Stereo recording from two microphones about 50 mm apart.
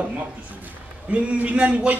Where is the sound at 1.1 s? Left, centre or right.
Right.